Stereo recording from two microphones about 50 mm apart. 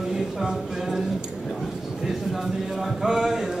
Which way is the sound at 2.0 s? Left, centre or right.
Centre.